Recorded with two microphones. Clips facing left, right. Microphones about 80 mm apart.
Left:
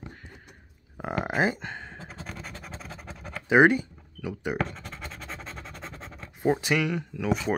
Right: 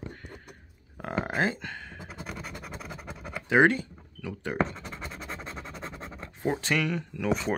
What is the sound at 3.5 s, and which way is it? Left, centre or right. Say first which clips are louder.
Speech: left 3 dB; centre.